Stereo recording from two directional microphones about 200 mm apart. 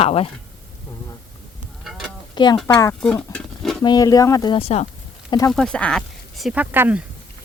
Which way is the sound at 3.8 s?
20° left (ahead or behind).